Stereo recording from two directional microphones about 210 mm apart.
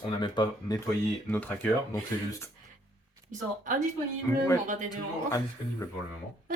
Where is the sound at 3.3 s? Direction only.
40° right (ahead or behind).